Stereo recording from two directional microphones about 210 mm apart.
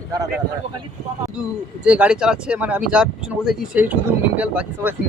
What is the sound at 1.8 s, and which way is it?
Speech, 5° right (ahead or behind).